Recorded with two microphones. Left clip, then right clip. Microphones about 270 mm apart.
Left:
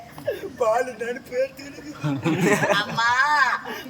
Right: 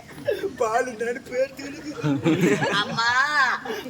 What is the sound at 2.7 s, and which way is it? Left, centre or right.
A man's voice, centre.